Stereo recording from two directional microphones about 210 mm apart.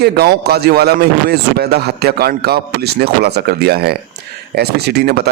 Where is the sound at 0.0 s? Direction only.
50° right (ahead or behind).